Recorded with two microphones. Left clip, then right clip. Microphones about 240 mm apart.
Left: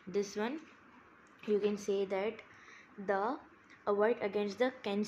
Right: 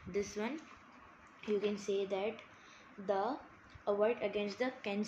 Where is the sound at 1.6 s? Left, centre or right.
Left.